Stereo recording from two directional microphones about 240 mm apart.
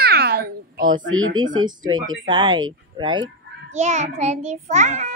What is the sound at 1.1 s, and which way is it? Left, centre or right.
Speech, right.